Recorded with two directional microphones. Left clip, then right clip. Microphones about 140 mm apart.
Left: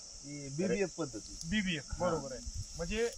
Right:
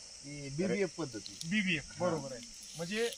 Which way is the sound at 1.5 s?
5° left (ahead or behind).